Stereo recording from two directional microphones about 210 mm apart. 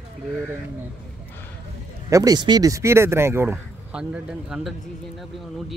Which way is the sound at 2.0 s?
15° right (ahead or behind).